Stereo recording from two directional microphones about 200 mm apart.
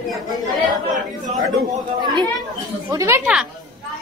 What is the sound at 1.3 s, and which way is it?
Speech, centre (ahead or behind).